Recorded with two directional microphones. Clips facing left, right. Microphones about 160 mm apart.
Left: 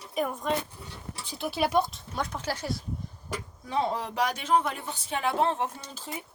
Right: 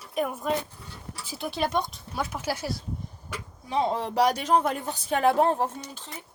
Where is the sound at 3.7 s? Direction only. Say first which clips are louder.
Right 3 dB; 20° right (ahead or behind); by 5.7 s 40° right (ahead or behind).